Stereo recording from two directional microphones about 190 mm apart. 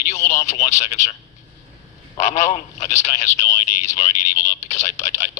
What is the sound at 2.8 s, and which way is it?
Radio, 15° left (ahead or behind).